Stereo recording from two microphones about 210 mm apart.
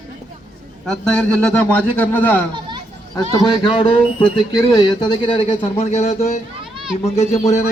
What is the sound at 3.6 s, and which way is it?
Speech, 25° left (ahead or behind).